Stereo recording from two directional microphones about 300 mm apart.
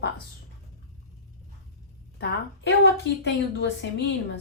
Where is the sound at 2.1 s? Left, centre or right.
Left.